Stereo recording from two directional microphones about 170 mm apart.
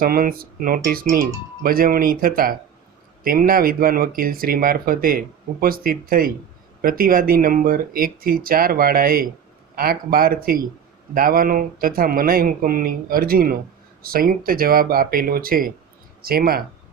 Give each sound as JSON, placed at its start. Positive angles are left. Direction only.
{"t": 0.0, "sound": "speech", "side_deg": -60}